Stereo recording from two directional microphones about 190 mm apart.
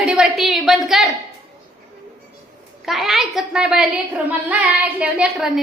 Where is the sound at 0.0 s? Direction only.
5° right (ahead or behind).